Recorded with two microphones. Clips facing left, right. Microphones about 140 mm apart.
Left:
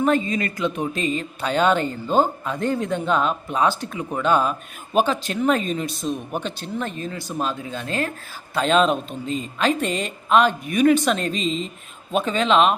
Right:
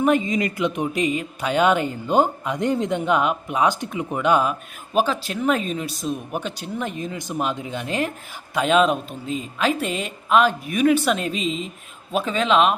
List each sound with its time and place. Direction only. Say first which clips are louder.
0.0 s a woman's voice: right 1 dB; 15° right (ahead or behind)